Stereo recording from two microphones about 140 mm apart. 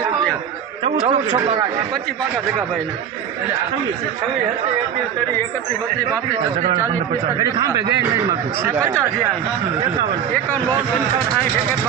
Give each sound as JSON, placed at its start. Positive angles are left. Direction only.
{"t": 0.9, "sound": "a man's voice", "side_deg": -55}
{"t": 7.3, "sound": "speech", "side_deg": -25}